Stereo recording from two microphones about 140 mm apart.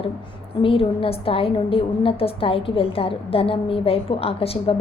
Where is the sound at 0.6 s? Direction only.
40° left (ahead or behind).